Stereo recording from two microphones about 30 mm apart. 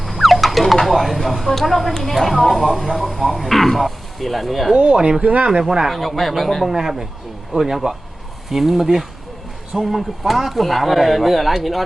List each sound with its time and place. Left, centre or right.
0.0 s a woman's voice: centre
5.2 s speech: right
5.6 s speech: centre
5.9 s speech: centre
6.7 s speech: centre